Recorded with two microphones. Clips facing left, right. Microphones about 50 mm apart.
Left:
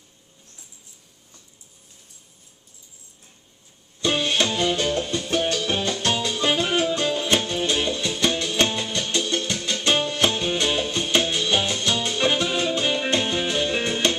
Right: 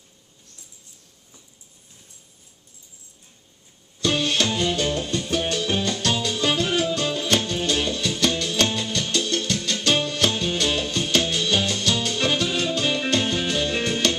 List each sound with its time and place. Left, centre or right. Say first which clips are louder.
4.0 s music: even; centre